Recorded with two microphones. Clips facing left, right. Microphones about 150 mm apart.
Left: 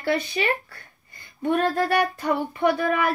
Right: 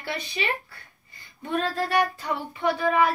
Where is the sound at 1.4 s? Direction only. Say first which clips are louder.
Left 5 dB; 60° left (ahead or behind).